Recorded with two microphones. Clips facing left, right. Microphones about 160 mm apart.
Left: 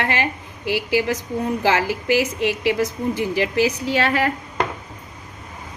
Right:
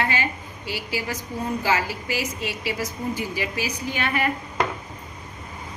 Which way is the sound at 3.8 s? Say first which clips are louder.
Left 5 dB; 85° left.